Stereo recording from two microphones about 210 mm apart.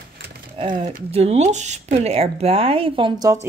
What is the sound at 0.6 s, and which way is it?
Speech, 20° right (ahead or behind).